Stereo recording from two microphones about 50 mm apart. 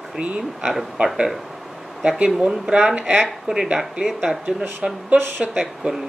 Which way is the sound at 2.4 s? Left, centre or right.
Centre.